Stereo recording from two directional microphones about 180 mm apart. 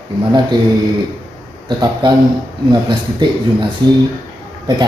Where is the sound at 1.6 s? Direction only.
25° right (ahead or behind).